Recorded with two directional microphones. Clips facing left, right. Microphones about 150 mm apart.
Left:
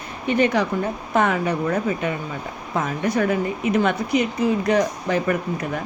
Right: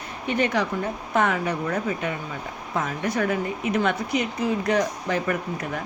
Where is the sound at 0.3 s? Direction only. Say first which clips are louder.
Left 4 dB; 20° left (ahead or behind).